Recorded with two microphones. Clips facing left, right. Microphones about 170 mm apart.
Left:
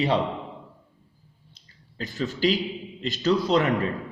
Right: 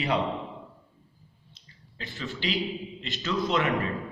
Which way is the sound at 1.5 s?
40° left (ahead or behind).